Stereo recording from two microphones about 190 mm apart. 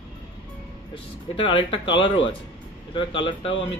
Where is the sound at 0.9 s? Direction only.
25° left (ahead or behind).